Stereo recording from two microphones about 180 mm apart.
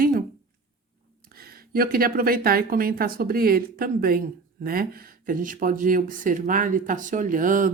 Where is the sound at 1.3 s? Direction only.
55° right (ahead or behind).